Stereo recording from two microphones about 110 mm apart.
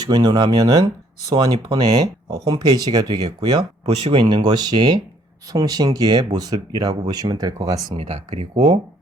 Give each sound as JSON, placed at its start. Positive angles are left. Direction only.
{"t": 0.0, "sound": "speech", "side_deg": -40}
{"t": 3.8, "sound": "speech", "side_deg": -80}
{"t": 4.1, "sound": "speech", "side_deg": -50}
{"t": 7.9, "sound": "speech", "side_deg": -80}
{"t": 8.5, "sound": "speech", "side_deg": -35}